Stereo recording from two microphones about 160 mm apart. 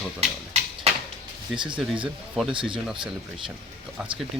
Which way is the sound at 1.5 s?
30° right (ahead or behind).